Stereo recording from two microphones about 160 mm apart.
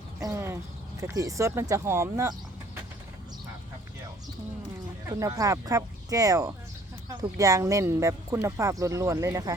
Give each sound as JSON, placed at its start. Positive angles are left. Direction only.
{"t": 0.2, "sound": "speech", "side_deg": -20}
{"t": 5.0, "sound": "speech", "side_deg": -20}